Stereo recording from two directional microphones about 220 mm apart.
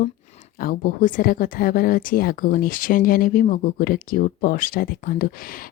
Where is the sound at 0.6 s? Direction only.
40° left (ahead or behind).